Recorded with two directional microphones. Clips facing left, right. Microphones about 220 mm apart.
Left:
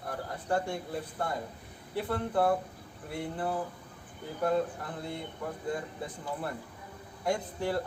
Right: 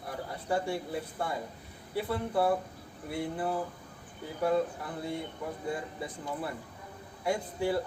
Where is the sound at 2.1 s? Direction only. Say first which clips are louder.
Left 1 dB; 10° right (ahead or behind).